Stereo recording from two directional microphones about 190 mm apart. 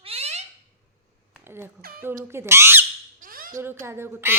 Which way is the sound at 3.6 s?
15° right (ahead or behind).